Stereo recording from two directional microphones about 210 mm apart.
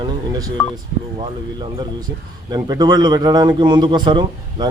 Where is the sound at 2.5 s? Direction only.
20° right (ahead or behind).